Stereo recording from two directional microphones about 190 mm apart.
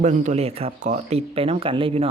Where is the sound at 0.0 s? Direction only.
40° right (ahead or behind).